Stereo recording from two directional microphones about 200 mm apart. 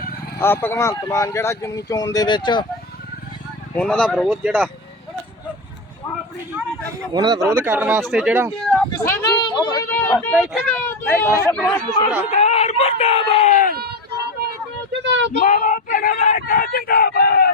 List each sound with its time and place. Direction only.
0.3 s speech: 10° left (ahead or behind)
3.8 s speech: 5° left (ahead or behind)
7.1 s speech: 20° right (ahead or behind)
8.9 s speech: 15° left (ahead or behind)
9.9 s speech: 10° left (ahead or behind)
12.2 s a sound: 35° left (ahead or behind)
14.4 s vehicle: 50° right (ahead or behind)
15.0 s a sound: 65° right (ahead or behind)
15.4 s a sound: 40° left (ahead or behind)